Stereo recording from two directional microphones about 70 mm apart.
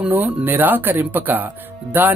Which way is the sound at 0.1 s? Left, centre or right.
Right.